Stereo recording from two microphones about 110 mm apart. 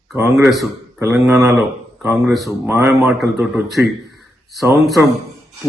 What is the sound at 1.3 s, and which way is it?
A man's voice, 30° right (ahead or behind).